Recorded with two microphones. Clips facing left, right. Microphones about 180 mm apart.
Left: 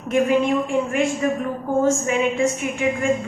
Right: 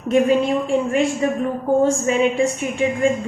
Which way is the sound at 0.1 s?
30° right (ahead or behind).